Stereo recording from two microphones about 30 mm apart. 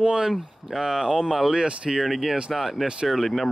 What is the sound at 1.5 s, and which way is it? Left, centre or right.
Speech, right.